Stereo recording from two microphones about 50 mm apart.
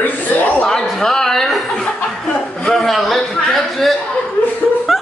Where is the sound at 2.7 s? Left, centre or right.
Centre.